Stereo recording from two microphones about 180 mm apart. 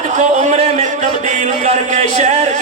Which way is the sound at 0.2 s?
40° right (ahead or behind).